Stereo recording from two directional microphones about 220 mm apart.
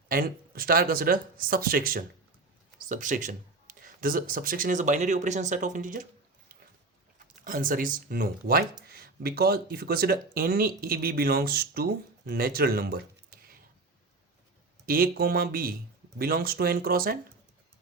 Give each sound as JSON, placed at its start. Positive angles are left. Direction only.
{"t": 0.1, "sound": "speech", "side_deg": -40}
{"t": 7.3, "sound": "speech", "side_deg": -40}
{"t": 14.8, "sound": "speech", "side_deg": -40}